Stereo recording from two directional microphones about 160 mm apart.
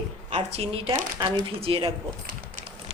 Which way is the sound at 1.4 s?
35° right (ahead or behind).